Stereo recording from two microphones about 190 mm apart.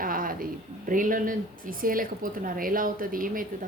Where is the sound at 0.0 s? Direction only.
50° right (ahead or behind).